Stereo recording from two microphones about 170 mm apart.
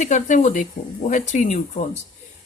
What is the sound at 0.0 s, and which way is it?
Speech, 45° left (ahead or behind).